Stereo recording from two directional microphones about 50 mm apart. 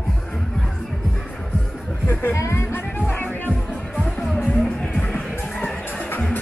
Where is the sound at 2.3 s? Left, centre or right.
Left.